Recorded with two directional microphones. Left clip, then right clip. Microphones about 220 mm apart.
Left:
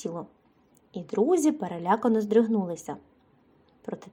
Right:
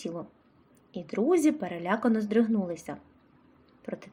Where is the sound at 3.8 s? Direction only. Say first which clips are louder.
Left 1 dB; 25° left (ahead or behind).